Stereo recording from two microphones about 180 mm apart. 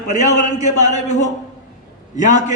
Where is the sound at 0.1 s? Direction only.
40° left (ahead or behind).